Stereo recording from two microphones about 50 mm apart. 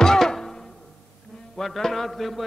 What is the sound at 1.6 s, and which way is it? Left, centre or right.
Speech, centre.